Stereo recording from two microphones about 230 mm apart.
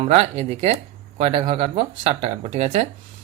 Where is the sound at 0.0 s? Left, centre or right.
Right.